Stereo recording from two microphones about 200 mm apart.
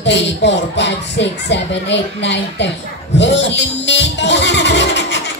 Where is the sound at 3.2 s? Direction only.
60° left (ahead or behind).